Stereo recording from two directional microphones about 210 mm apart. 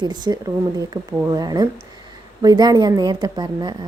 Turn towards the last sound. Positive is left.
turn(degrees=-20)  # may be behind; listen again after turning